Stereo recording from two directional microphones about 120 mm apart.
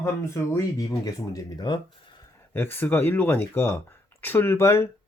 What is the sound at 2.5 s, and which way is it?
Speech, 15° left (ahead or behind).